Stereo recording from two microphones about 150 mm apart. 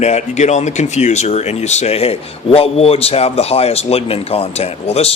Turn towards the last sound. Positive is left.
turn(degrees=45)  # may be behind; listen again after turning